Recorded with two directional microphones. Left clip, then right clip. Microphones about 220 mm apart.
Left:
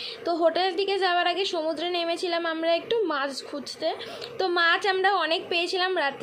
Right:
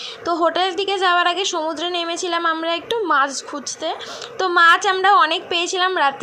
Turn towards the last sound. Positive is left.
turn(degrees=-15)  # may be behind; listen again after turning